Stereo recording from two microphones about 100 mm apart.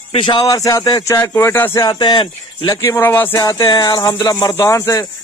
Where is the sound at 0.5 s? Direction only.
35° left (ahead or behind).